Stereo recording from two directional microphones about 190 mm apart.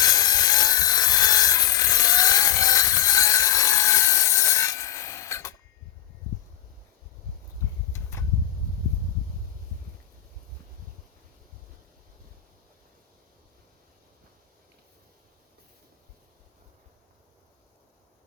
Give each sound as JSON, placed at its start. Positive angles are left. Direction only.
{"t": 0.0, "sound": "wood", "side_deg": 20}